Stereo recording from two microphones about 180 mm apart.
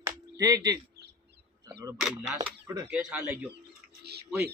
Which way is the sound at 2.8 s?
5° right (ahead or behind).